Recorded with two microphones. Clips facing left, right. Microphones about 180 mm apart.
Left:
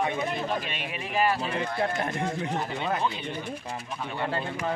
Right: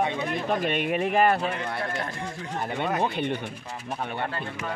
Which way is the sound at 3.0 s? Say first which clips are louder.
Right 4 dB; 60° right (ahead or behind).